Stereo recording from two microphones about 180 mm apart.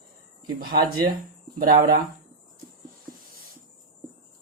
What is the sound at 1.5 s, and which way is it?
Speech, 55° right (ahead or behind).